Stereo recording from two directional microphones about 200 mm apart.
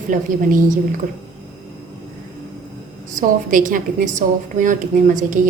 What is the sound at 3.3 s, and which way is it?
A woman's voice, 40° right (ahead or behind).